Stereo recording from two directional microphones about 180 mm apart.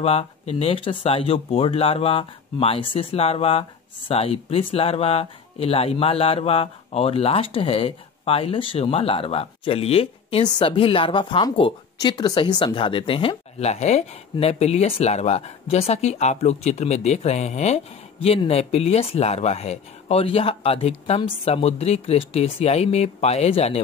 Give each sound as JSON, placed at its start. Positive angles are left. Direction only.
{"t": 0.0, "sound": "speech", "side_deg": 35}